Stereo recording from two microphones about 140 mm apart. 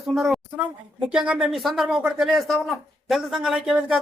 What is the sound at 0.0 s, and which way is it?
Speech, centre (ahead or behind).